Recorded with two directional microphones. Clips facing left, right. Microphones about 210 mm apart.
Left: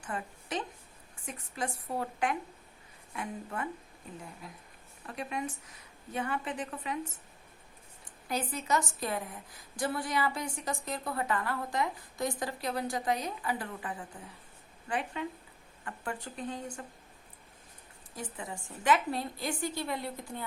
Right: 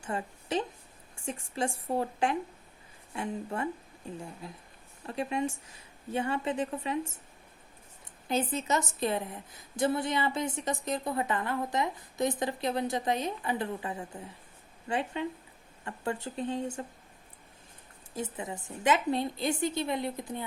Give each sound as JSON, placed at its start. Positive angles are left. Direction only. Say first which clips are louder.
{"t": 0.0, "sound": "a woman's voice", "louder": "right 4 dB", "side_deg": -25}
{"t": 5.0, "sound": "a woman's voice", "louder": "right 5 dB", "side_deg": -25}
{"t": 8.3, "sound": "a woman's voice", "louder": "right 3 dB", "side_deg": -25}
{"t": 18.1, "sound": "a woman's voice", "louder": "right 5 dB", "side_deg": -25}